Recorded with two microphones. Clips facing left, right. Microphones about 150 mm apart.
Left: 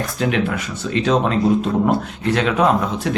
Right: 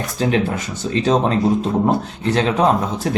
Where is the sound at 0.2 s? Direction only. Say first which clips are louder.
Right 2 dB; 35° right (ahead or behind).